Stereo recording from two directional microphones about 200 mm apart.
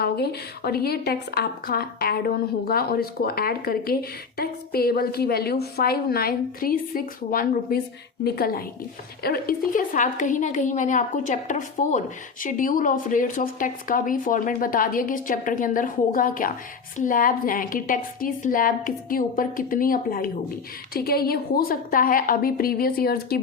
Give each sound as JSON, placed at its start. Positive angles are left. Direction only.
{"t": 0.0, "sound": "a woman's voice", "side_deg": 50}